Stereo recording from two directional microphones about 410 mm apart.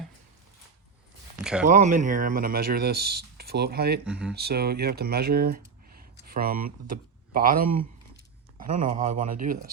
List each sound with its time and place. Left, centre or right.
1.6 s speech: centre
4.0 s speech: centre
4.4 s speech: right